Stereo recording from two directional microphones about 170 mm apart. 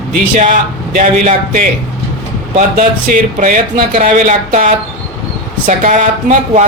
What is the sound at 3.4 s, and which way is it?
Speech, 50° right (ahead or behind).